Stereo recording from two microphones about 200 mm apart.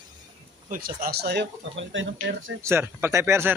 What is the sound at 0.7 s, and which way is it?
Speech, 45° right (ahead or behind).